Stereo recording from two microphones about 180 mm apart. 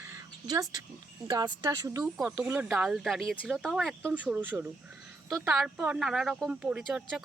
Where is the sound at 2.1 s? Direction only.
5° right (ahead or behind).